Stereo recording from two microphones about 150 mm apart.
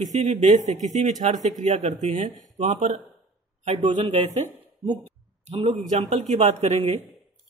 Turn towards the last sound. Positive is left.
turn(degrees=-45)  # may be behind; listen again after turning